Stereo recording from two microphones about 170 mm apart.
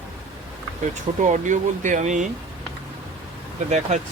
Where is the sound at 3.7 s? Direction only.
45° right (ahead or behind).